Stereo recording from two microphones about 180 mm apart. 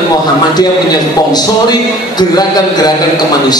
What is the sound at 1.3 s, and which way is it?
A man's voice, 25° left (ahead or behind).